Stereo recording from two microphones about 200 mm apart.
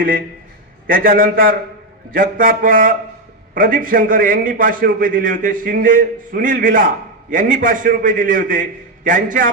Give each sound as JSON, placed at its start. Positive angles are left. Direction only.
{"t": 0.9, "sound": "a man's voice", "side_deg": -45}